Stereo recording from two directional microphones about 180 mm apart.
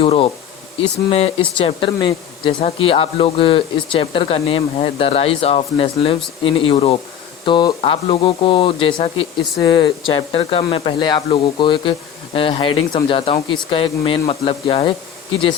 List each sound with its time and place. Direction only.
0.0 s speech: 35° left (ahead or behind)